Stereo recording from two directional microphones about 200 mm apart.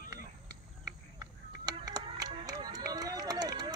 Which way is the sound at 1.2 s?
20° right (ahead or behind).